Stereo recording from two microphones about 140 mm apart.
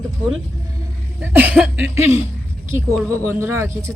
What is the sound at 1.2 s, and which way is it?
A man's voice, 15° right (ahead or behind).